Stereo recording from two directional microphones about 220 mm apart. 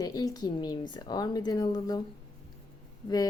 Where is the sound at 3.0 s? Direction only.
15° left (ahead or behind).